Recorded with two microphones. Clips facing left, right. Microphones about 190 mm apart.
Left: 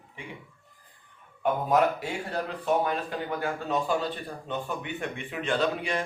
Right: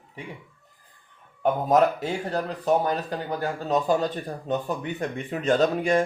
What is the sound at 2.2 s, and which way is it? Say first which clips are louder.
Speech: right 4 dB; 40° right (ahead or behind).